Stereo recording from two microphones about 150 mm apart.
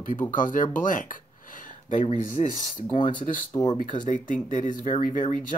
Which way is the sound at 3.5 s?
25° left (ahead or behind).